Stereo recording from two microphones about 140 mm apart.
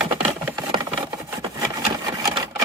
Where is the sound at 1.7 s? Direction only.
25° right (ahead or behind).